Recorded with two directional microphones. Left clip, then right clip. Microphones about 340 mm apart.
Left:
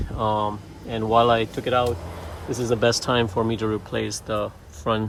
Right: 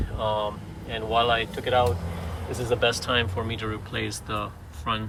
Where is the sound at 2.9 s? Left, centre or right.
Centre.